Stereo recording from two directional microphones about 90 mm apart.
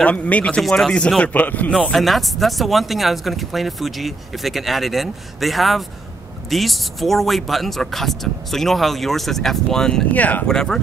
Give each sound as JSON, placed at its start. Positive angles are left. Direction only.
{"t": 0.0, "sound": "speech", "side_deg": 15}
{"t": 0.6, "sound": "speech", "side_deg": 5}
{"t": 1.9, "sound": "speech", "side_deg": 0}
{"t": 10.1, "sound": "speech", "side_deg": 20}
{"t": 10.5, "sound": "speech", "side_deg": 5}